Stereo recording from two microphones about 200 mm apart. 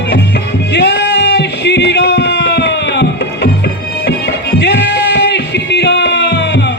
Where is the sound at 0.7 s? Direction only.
60° left (ahead or behind).